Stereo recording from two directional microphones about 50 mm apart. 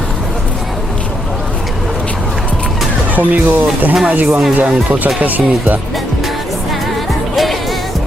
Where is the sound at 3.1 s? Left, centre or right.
Right.